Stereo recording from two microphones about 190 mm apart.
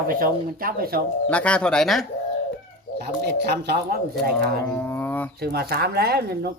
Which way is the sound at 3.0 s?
60° right (ahead or behind).